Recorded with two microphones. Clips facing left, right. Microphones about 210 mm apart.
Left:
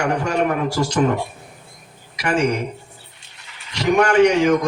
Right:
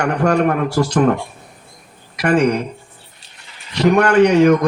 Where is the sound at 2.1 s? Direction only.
60° right (ahead or behind).